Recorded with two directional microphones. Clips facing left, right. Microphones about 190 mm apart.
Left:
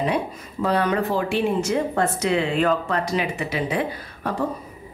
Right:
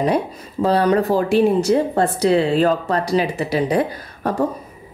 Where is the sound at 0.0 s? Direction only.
35° right (ahead or behind).